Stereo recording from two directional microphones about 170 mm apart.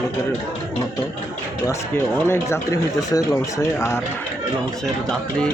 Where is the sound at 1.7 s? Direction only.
15° left (ahead or behind).